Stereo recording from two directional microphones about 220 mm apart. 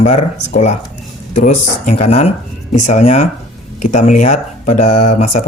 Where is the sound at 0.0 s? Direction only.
30° left (ahead or behind).